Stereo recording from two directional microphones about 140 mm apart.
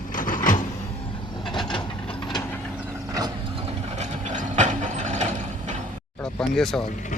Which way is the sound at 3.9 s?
60° right (ahead or behind).